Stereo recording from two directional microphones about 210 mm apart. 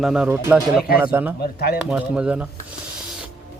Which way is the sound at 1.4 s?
50° left (ahead or behind).